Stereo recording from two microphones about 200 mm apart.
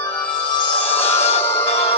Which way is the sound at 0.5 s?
20° left (ahead or behind).